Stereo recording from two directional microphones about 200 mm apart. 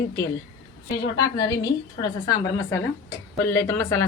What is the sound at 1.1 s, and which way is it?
A woman's voice, 20° left (ahead or behind).